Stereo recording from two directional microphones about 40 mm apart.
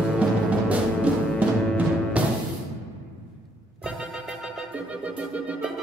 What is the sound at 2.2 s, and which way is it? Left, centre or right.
Music, right.